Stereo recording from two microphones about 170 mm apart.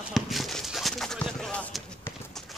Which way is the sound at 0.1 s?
Centre (ahead or behind).